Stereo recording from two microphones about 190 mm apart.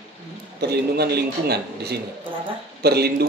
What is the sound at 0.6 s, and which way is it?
A man's voice, 55° right (ahead or behind).